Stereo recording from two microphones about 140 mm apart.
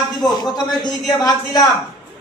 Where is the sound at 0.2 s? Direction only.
30° left (ahead or behind).